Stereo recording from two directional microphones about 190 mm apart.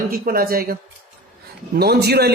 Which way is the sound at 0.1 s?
50° right (ahead or behind).